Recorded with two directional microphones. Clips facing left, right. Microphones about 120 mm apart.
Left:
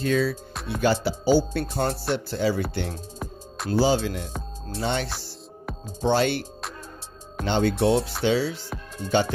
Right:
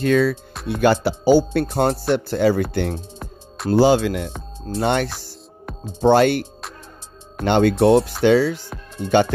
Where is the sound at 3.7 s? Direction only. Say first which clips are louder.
Right 7 dB; 65° right (ahead or behind).